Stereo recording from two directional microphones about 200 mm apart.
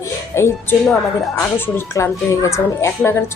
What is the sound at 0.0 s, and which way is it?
Music, 15° left (ahead or behind).